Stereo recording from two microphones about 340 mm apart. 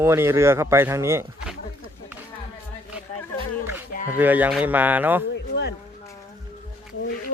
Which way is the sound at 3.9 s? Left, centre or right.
Left.